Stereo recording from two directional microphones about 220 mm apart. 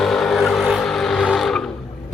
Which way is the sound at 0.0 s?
Centre (ahead or behind).